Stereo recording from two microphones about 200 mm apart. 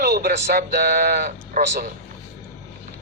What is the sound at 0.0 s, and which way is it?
Speech, 50° right (ahead or behind).